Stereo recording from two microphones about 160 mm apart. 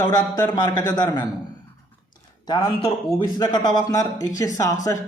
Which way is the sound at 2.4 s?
30° left (ahead or behind).